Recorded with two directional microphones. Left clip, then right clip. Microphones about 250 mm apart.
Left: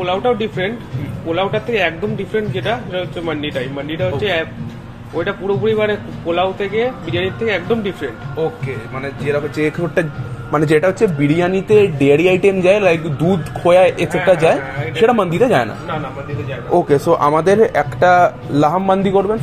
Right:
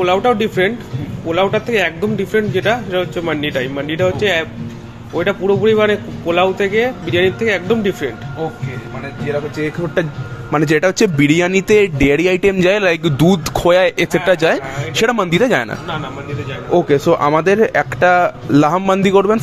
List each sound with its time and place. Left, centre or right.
0.0 s speech: right
9.2 s speech: centre
10.0 s a man's voice: centre
10.7 s speech: right
11.7 s speech: right
16.7 s speech: right
18.7 s speech: right